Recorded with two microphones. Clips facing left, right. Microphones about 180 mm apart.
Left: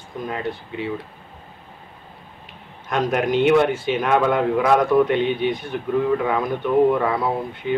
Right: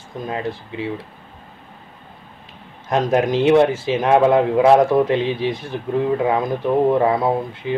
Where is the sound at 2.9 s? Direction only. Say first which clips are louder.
Right 3 dB; 30° right (ahead or behind).